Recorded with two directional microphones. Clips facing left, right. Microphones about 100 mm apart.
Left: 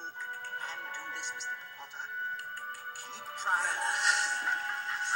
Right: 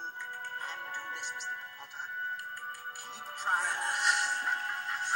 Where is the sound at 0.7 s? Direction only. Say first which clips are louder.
Right 1 dB; 40° right (ahead or behind).